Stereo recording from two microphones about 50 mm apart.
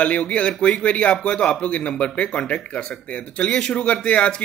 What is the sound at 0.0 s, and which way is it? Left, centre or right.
Speech, left.